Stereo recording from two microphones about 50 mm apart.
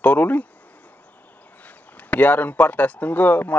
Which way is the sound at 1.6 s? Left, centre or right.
Left.